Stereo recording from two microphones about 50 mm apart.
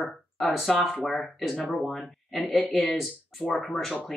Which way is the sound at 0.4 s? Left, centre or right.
Left.